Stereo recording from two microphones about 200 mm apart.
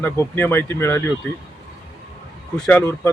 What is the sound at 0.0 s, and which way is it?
Speech, 10° left (ahead or behind).